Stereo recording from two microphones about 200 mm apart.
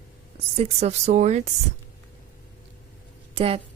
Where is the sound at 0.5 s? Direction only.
30° right (ahead or behind).